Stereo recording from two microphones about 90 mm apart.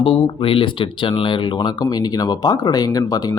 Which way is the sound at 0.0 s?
70° left (ahead or behind).